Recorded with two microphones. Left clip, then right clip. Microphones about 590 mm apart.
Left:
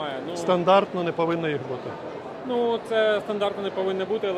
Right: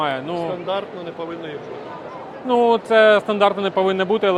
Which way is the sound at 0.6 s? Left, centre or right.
Left.